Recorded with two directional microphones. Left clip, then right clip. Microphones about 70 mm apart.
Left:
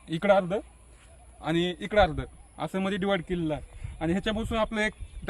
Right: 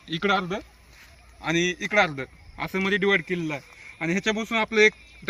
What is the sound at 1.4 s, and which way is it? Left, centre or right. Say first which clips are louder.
Speech: right 4 dB; centre.